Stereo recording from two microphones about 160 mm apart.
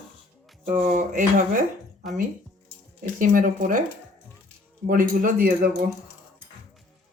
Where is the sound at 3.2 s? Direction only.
60° right (ahead or behind).